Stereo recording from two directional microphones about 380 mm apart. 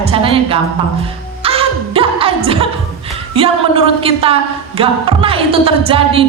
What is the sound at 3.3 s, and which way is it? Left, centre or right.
A woman's voice, centre.